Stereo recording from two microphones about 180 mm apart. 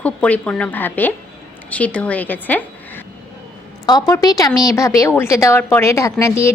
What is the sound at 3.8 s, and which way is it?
A woman's voice, 20° left (ahead or behind).